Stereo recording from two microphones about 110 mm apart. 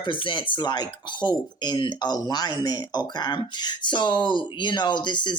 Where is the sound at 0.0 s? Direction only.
50° left (ahead or behind).